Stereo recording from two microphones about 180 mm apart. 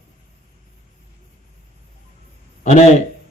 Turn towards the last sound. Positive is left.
turn(degrees=40)  # may be behind; listen again after turning